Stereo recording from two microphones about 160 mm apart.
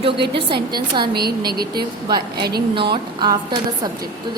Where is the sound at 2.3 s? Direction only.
80° right.